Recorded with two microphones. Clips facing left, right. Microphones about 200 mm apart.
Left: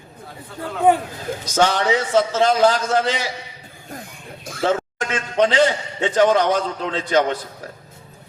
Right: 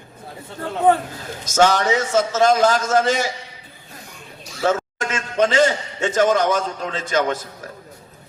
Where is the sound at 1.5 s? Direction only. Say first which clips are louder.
Right 2 dB; 45° right (ahead or behind).